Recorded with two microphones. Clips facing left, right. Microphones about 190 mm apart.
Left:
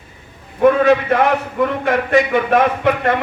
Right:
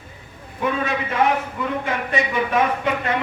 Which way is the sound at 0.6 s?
65° left (ahead or behind).